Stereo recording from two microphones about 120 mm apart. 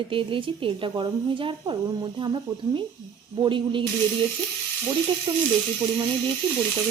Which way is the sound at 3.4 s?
45° right (ahead or behind).